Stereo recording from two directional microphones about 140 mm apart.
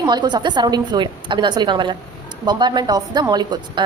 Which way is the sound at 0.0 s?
30° right (ahead or behind).